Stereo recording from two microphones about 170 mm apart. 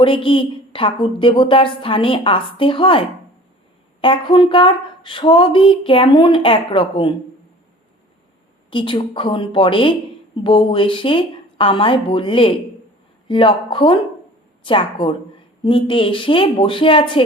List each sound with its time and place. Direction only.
0.0 s speech: 30° left (ahead or behind)
4.0 s speech: 30° left (ahead or behind)
8.7 s speech: 30° left (ahead or behind)